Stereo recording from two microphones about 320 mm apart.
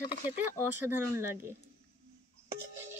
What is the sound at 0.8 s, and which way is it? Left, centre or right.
Speech, centre.